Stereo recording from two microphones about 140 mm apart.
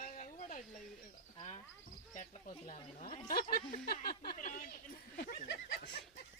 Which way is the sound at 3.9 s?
90° left.